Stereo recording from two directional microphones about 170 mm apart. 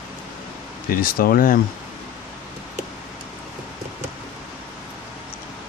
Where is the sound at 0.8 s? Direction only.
60° left (ahead or behind).